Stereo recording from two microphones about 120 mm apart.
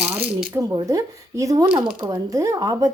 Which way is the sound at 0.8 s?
30° right (ahead or behind).